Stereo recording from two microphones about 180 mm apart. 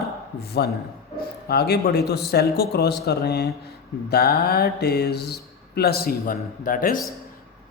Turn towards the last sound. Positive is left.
turn(degrees=50)  # may be behind; listen again after turning